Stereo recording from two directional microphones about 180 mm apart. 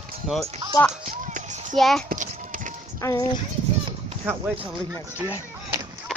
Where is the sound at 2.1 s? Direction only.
45° right (ahead or behind).